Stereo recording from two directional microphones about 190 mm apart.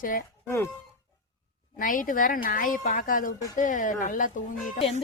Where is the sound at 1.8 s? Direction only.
45° left (ahead or behind).